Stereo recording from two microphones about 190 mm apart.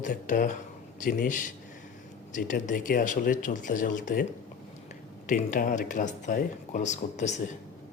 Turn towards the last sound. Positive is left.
turn(degrees=40)  # may be behind; listen again after turning